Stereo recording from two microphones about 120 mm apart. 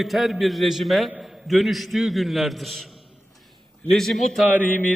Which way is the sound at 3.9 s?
5° left (ahead or behind).